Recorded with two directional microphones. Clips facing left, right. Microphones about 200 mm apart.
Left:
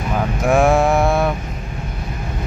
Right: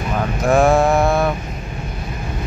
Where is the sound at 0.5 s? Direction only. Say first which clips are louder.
Right 1 dB; 10° left (ahead or behind).